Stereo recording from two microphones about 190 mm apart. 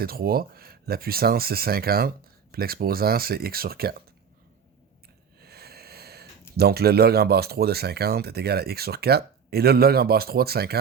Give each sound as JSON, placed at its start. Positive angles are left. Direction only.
{"t": 0.0, "sound": "speech", "side_deg": -50}
{"t": 5.4, "sound": "a sound", "side_deg": -55}
{"t": 6.6, "sound": "speech", "side_deg": -55}